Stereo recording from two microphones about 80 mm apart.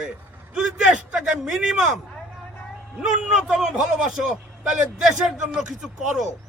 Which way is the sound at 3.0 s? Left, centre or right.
Centre.